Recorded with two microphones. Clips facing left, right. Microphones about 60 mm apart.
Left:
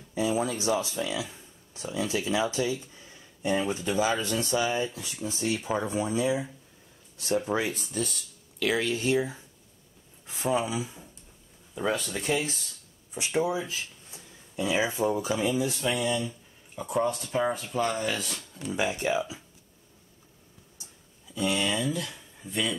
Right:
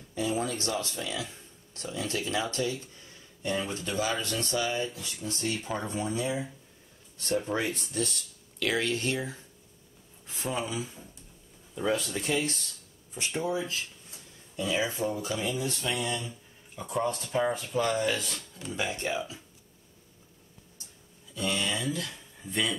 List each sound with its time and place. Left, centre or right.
0.1 s speech: centre
10.5 s speech: centre
12.2 s speech: centre
18.7 s speech: centre
21.4 s speech: centre